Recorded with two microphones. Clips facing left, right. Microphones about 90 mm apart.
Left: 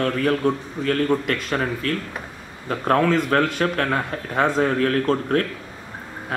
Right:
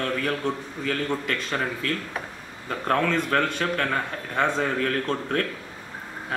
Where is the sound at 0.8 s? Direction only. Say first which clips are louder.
Left 7 dB; 20° left (ahead or behind).